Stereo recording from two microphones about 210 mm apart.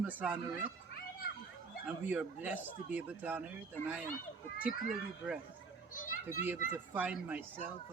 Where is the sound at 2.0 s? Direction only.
10° right (ahead or behind).